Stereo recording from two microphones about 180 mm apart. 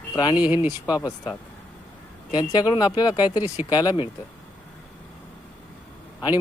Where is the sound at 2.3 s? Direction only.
25° left (ahead or behind).